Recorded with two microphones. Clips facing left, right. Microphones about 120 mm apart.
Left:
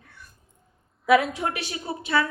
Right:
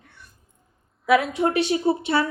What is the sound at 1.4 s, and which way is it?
Speech, 30° right (ahead or behind).